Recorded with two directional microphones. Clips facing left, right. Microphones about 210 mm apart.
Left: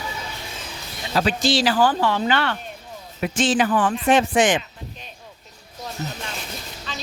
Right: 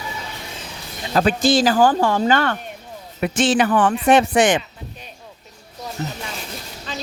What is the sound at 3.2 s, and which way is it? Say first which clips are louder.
Speech: right 3 dB; 65° right (ahead or behind).